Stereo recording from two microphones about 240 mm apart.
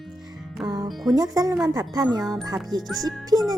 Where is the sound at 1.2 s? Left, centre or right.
Centre.